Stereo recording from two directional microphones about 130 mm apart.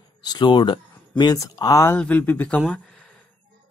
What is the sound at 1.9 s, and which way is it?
Speech, 10° left (ahead or behind).